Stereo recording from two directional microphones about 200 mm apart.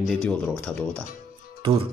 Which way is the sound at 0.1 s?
5° left (ahead or behind).